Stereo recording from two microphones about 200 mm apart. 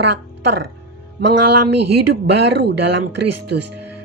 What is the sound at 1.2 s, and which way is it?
A woman's voice, 60° right (ahead or behind).